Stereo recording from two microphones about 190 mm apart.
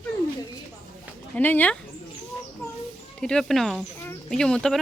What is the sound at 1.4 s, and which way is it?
Speech, 10° left (ahead or behind).